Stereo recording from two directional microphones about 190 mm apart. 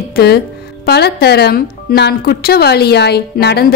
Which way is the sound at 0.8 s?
60° left (ahead or behind).